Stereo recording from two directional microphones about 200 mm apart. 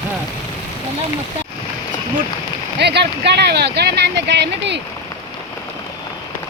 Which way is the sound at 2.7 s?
55° right (ahead or behind).